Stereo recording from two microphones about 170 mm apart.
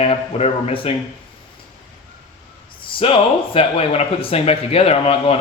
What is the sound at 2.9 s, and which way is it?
Speech, 30° left (ahead or behind).